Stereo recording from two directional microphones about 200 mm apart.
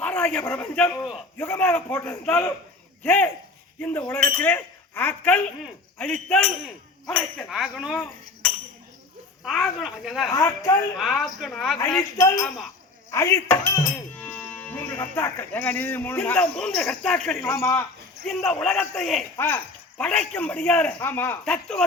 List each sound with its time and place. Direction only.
0.0 s a man's voice: 5° left (ahead or behind)
10.2 s speech: 15° left (ahead or behind)
10.9 s speech: centre (ahead or behind)
13.1 s speech: 15° left (ahead or behind)
13.9 s cattle: 5° left (ahead or behind)
18.3 s speech: centre (ahead or behind)